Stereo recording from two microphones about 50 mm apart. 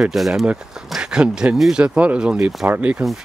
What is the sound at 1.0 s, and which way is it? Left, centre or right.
Speech, centre.